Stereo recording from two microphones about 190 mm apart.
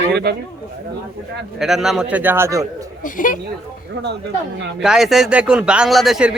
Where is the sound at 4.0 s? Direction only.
65° right (ahead or behind).